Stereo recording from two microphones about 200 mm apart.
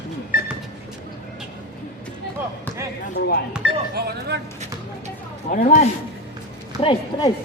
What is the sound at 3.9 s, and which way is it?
Speech, 50° right (ahead or behind).